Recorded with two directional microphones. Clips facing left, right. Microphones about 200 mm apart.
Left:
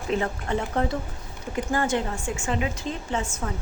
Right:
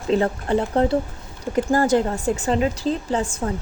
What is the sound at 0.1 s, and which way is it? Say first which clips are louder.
A woman's voice: right 7 dB; 35° right (ahead or behind).